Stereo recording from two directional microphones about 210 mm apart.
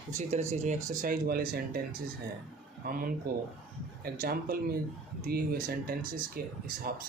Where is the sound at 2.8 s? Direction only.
45° right (ahead or behind).